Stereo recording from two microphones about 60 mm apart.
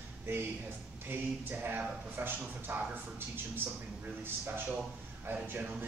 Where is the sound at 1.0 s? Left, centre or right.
Right.